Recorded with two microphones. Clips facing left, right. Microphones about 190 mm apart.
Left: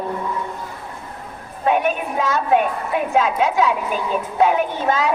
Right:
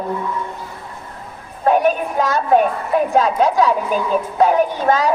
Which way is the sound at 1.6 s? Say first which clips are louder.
Right 4 dB; 40° right (ahead or behind).